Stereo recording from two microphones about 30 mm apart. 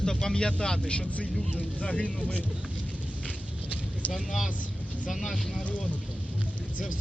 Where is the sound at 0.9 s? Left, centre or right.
Left.